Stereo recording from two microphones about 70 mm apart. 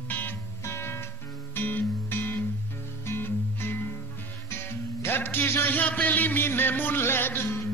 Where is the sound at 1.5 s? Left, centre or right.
Left.